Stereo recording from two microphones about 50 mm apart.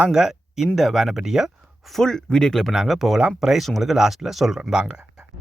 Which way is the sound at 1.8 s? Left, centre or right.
Centre.